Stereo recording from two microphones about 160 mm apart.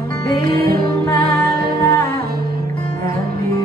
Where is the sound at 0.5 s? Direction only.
75° right (ahead or behind).